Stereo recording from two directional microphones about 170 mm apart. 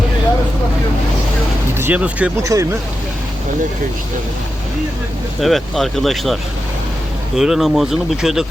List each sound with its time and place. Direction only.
1.8 s speech: 10° right (ahead or behind)
2.4 s speech: 20° right (ahead or behind)
5.4 s speech: centre (ahead or behind)